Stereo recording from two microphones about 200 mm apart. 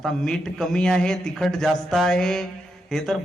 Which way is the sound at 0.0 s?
5° left (ahead or behind).